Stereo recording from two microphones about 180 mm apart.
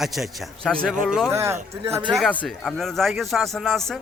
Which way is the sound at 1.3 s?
15° right (ahead or behind).